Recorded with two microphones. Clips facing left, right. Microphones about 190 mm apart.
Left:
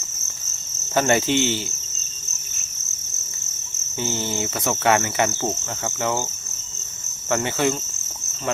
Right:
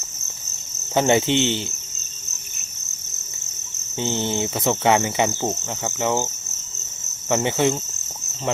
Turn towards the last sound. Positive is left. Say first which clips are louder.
# right 2 dB
turn(degrees=-20)  # may be behind; listen again after turning